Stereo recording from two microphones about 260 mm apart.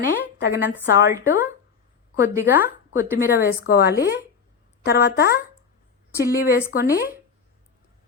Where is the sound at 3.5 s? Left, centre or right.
Left.